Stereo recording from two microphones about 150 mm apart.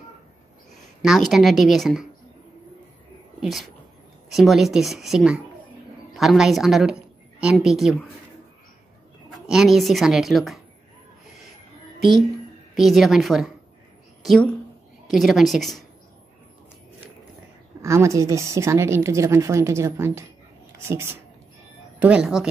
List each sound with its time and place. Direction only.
1.0 s speech: centre (ahead or behind)
3.3 s a sound: centre (ahead or behind)
4.3 s a woman's voice: centre (ahead or behind)
9.3 s speech: centre (ahead or behind)
12.7 s a woman's voice: centre (ahead or behind)
17.8 s a woman's voice: 20° right (ahead or behind)
22.0 s speech: 5° right (ahead or behind)